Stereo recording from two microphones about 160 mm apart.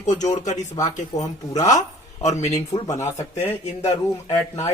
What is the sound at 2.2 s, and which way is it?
Speech, 45° left (ahead or behind).